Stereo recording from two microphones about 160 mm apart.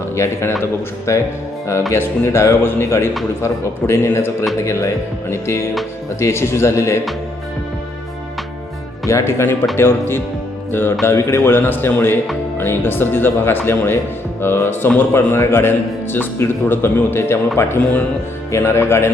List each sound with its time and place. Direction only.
0.6 s speech: 15° left (ahead or behind)
9.0 s speech: 15° left (ahead or behind)
10.7 s music: 15° left (ahead or behind)
11.0 s speech: 15° left (ahead or behind)